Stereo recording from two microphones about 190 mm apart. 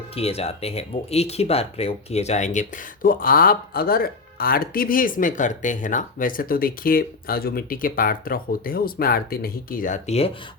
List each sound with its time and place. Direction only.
0.2 s speech: 30° left (ahead or behind)